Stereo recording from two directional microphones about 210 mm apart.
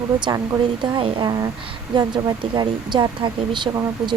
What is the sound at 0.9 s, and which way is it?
Speech, 20° right (ahead or behind).